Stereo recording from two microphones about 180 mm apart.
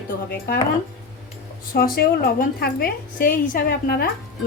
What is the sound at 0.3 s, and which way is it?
Speech, 60° left (ahead or behind).